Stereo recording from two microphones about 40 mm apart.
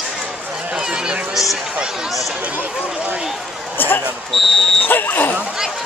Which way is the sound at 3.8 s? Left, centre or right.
Left.